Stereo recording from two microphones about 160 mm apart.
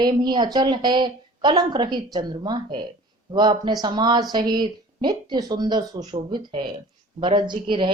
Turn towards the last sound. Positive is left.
turn(degrees=-30)  # may be behind; listen again after turning